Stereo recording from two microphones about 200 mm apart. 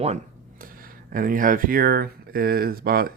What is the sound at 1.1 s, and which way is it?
Speech, 45° right (ahead or behind).